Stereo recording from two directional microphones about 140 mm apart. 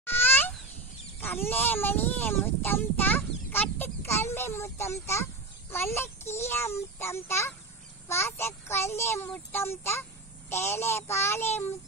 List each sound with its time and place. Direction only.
0.0 s goat: 15° left (ahead or behind)
1.2 s a child's voice: 15° left (ahead or behind)